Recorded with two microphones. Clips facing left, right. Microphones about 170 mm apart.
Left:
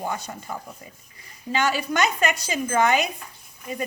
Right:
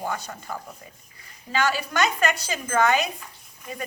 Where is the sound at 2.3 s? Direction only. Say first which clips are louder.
Left 2 dB; 15° left (ahead or behind).